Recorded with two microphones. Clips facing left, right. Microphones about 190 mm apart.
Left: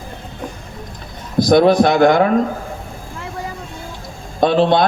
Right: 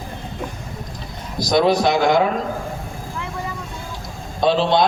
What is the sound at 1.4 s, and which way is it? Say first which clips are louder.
Speech: left 6 dB; 55° left (ahead or behind).